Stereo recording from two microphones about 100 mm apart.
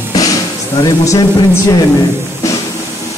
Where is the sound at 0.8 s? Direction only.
35° left (ahead or behind).